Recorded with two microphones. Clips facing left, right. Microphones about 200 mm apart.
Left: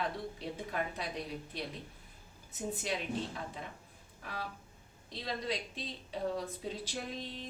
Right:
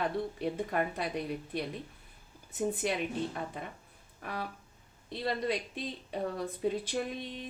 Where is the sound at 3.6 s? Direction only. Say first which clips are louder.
Right 4 dB; 55° right (ahead or behind).